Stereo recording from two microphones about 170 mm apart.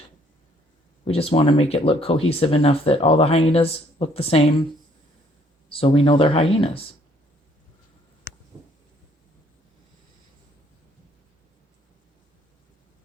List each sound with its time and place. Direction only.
1.0 s speech: 35° left (ahead or behind)
5.6 s speech: 30° left (ahead or behind)